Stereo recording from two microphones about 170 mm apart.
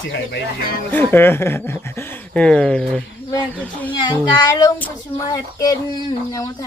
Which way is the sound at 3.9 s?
25° left (ahead or behind).